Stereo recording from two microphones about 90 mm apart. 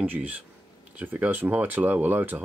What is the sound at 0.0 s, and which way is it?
Speech, 20° right (ahead or behind).